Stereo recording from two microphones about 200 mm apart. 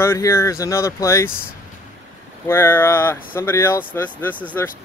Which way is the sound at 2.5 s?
10° left (ahead or behind).